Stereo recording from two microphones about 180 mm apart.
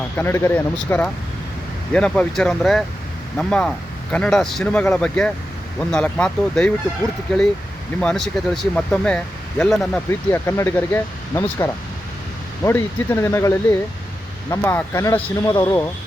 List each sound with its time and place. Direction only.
0.2 s speech: 15° left (ahead or behind)
10.1 s speech: 15° left (ahead or behind)